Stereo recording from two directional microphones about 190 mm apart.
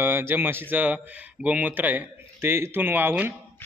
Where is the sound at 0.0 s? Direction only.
10° right (ahead or behind).